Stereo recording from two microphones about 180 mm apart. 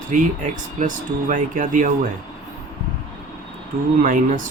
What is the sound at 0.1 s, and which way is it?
Speech, 45° right (ahead or behind).